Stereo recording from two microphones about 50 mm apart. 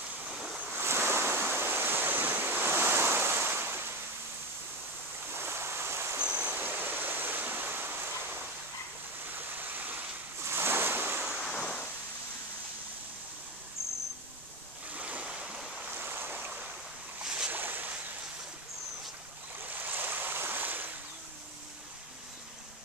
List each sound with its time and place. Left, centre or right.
0.7 s waves: right
5.3 s ocean: right
6.1 s stream: right
6.4 s stream: right
10.4 s waves: right
11.5 s a sound: left
15.0 s waves: right
15.3 s stream: centre
16.0 s stream: right
16.3 s waves: right
17.2 s boat: centre
17.5 s boat: right
19.6 s stream: right